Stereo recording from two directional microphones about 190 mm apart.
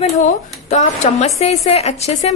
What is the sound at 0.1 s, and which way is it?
A woman's voice, 40° left (ahead or behind).